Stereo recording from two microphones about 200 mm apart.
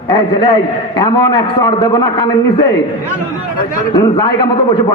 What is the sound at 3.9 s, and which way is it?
Speech, 25° left (ahead or behind).